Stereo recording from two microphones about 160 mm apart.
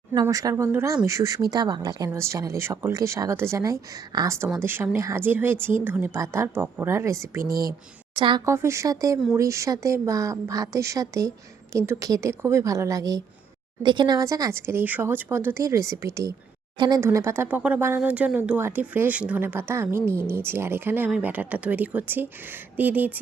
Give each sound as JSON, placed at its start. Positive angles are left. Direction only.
{"t": 0.1, "sound": "speech", "side_deg": -25}
{"t": 8.1, "sound": "a woman's voice", "side_deg": -30}
{"t": 8.4, "sound": "speech", "side_deg": -20}
{"t": 17.0, "sound": "speech", "side_deg": -15}